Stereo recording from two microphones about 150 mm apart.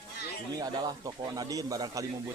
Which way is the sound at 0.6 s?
30° right (ahead or behind).